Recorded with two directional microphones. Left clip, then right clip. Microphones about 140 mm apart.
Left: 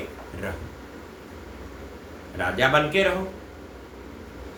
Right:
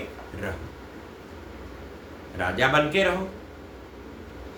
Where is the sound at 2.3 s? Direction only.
30° right (ahead or behind).